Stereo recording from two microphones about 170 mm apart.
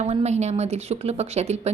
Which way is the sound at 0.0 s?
40° right (ahead or behind).